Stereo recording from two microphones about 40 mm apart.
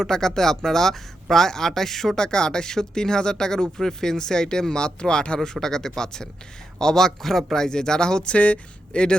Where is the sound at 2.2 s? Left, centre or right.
Centre.